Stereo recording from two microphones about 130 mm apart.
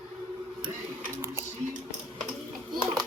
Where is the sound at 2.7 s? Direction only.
35° right (ahead or behind).